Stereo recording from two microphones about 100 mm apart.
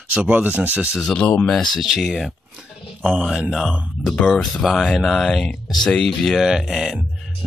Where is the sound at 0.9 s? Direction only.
10° left (ahead or behind).